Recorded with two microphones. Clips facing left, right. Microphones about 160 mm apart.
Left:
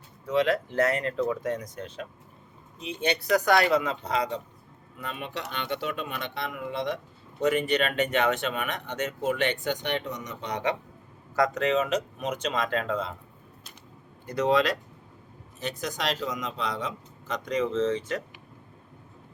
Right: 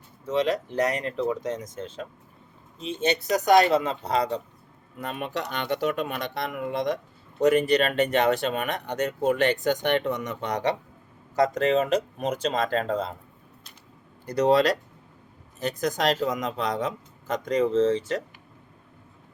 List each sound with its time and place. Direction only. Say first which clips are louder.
0.3 s speech: even; 20° right (ahead or behind)
4.9 s speech: right 5 dB; 45° right (ahead or behind)
11.6 s speech: right 3 dB; 35° right (ahead or behind)
14.3 s speech: right 4 dB; 35° right (ahead or behind)